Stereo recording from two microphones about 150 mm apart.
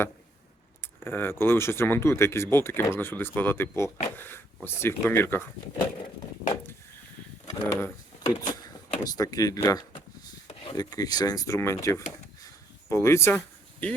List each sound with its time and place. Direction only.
0.8 s speech: 15° left (ahead or behind)
7.4 s speech: 25° left (ahead or behind)